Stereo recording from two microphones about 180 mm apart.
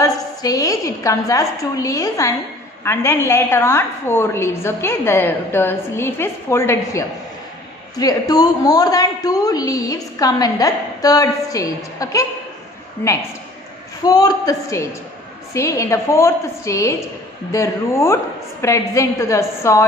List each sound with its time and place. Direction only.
0.0 s a woman's voice: 20° left (ahead or behind)